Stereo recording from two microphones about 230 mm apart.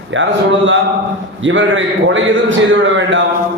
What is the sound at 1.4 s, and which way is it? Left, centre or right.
A man's voice, right.